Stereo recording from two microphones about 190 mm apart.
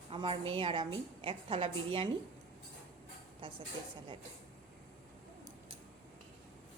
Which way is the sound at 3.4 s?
25° right (ahead or behind).